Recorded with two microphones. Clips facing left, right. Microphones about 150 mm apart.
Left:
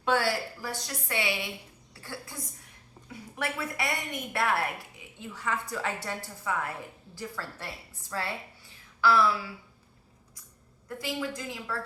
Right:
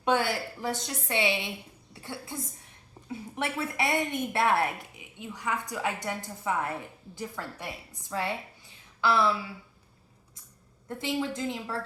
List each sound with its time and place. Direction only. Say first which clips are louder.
0.0 s a woman's voice: right 1 dB; 20° right (ahead or behind)
10.8 s a woman's voice: right 3 dB; 25° right (ahead or behind)